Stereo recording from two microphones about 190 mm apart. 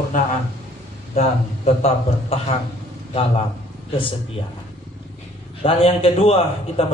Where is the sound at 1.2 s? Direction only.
35° left (ahead or behind).